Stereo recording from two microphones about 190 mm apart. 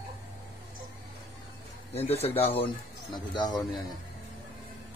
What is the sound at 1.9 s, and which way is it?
Speech, 35° left (ahead or behind).